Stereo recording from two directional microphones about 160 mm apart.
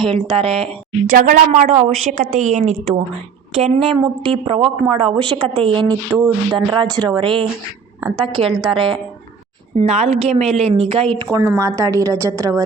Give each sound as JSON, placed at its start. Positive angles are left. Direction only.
{"t": 0.1, "sound": "speech", "side_deg": -35}
{"t": 1.0, "sound": "a woman's voice", "side_deg": -55}
{"t": 6.1, "sound": "a sound", "side_deg": -15}
{"t": 6.7, "sound": "a woman's voice", "side_deg": -25}
{"t": 11.3, "sound": "a woman's voice", "side_deg": -20}